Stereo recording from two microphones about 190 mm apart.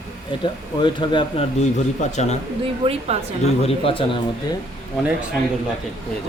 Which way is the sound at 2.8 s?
30° right (ahead or behind).